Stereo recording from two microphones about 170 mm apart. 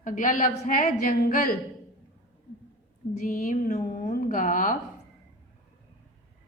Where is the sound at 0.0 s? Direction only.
50° left (ahead or behind).